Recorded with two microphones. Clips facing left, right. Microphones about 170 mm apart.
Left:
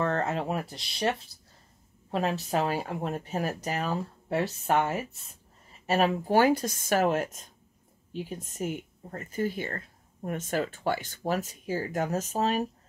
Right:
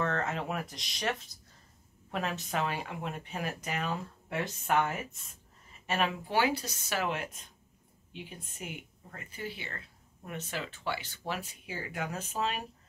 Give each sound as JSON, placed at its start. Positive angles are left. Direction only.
{"t": 0.0, "sound": "speech", "side_deg": 35}